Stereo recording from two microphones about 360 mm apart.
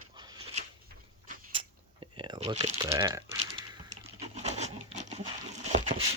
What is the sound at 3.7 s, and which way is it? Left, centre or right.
Patter, centre.